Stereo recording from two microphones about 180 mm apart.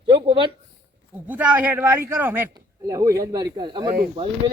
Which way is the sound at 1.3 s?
10° right (ahead or behind).